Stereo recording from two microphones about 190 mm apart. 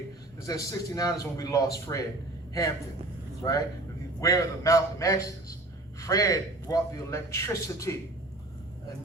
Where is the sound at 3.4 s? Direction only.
20° left (ahead or behind).